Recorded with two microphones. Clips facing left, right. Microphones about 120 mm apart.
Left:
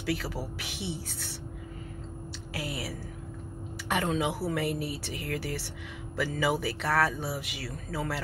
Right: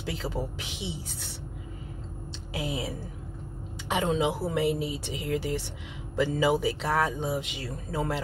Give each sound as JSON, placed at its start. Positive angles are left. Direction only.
{"t": 0.0, "sound": "speech", "side_deg": -20}
{"t": 2.5, "sound": "speech", "side_deg": -20}